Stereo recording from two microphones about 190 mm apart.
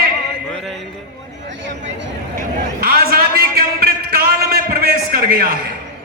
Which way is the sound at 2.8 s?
50° right (ahead or behind).